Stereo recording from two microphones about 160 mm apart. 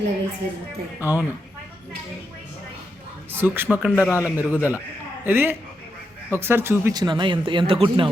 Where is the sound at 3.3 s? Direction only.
15° right (ahead or behind); by 8.0 s 35° right (ahead or behind).